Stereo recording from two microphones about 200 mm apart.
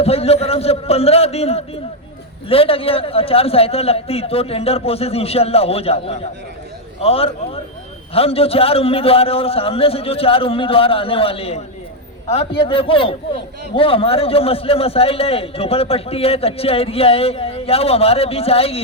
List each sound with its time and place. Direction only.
0.0 s a man's voice: 30° left (ahead or behind)